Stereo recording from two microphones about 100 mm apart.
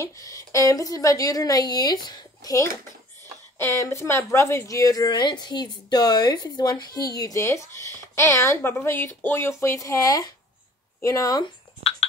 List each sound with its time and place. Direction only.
0.0 s speech: 35° left (ahead or behind)